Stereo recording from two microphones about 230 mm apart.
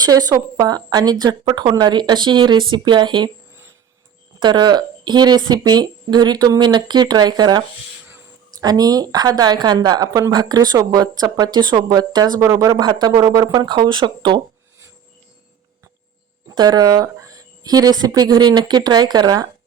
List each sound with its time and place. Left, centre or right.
0.0 s a woman's voice: centre
4.4 s speech: centre
16.6 s speech: centre